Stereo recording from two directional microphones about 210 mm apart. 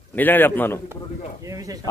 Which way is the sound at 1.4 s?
15° right (ahead or behind).